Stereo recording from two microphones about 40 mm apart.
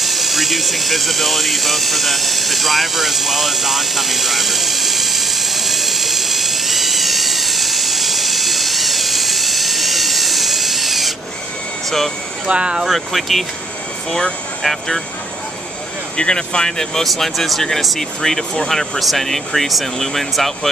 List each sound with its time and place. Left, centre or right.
0.0 s a sound: centre
12.4 s speech: right
12.8 s speech: centre
14.6 s speech: centre
16.2 s speech: left; by 20.5 s centre